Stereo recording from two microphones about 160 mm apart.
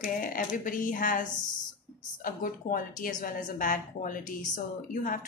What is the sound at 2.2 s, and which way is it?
A woman's voice, 60° left (ahead or behind).